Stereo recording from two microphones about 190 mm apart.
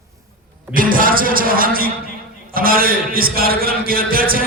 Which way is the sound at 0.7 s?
45° right (ahead or behind).